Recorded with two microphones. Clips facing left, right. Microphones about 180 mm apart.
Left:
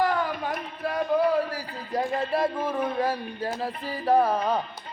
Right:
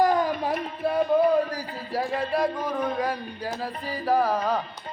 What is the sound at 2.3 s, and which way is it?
Music, 5° left (ahead or behind).